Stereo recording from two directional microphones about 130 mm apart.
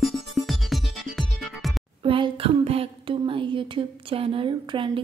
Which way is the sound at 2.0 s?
40° right (ahead or behind).